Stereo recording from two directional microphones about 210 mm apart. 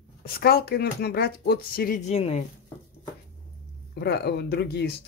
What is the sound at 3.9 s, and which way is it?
Speech, 50° left (ahead or behind).